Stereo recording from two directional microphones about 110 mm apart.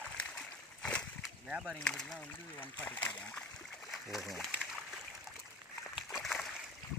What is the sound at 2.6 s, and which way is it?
Speech, 15° left (ahead or behind).